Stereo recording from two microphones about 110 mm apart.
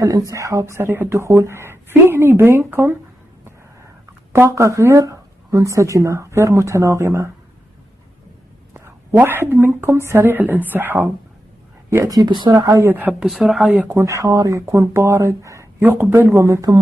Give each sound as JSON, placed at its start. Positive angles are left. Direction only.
{"t": 0.0, "sound": "speech", "side_deg": -30}
{"t": 4.3, "sound": "speech", "side_deg": -25}
{"t": 8.7, "sound": "a woman's voice", "side_deg": -20}
{"t": 12.1, "sound": "speech", "side_deg": -40}
{"t": 12.5, "sound": "speech", "side_deg": -30}
{"t": 12.9, "sound": "speech", "side_deg": -15}
{"t": 13.3, "sound": "speech", "side_deg": 0}
{"t": 13.7, "sound": "speech", "side_deg": -15}
{"t": 14.0, "sound": "speech", "side_deg": -30}
{"t": 15.8, "sound": "speech", "side_deg": -15}
{"t": 16.3, "sound": "speech", "side_deg": -30}